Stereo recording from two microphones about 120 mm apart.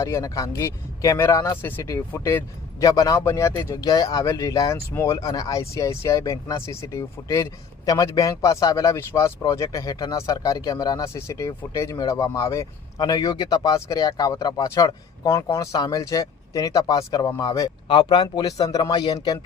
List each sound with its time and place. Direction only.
0.0 s a man's voice: 25° left (ahead or behind)
17.8 s speech: 45° left (ahead or behind)